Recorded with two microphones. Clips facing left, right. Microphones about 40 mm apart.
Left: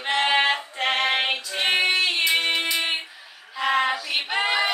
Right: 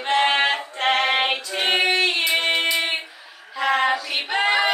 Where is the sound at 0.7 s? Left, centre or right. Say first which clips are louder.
Right 3 dB; centre.